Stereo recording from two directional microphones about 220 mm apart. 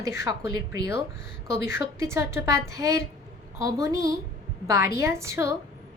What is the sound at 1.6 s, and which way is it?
A woman's voice, 10° right (ahead or behind).